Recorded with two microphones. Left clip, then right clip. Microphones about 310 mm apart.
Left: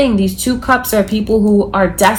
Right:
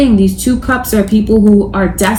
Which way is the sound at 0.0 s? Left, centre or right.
Centre.